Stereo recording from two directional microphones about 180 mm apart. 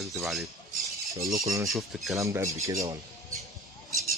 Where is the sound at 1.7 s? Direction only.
Centre (ahead or behind).